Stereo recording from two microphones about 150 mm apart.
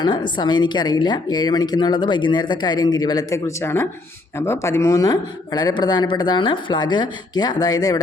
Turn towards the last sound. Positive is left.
turn(degrees=25)  # may be behind; listen again after turning